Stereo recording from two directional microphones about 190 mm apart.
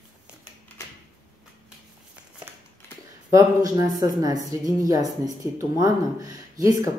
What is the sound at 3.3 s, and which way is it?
Speech, 15° right (ahead or behind).